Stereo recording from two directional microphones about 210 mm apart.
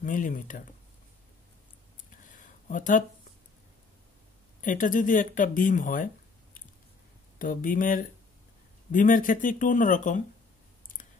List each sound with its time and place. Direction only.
0.0 s speech: 40° left (ahead or behind)
2.0 s a sound: 40° left (ahead or behind)
4.6 s speech: 40° left (ahead or behind)
7.3 s speech: 40° left (ahead or behind)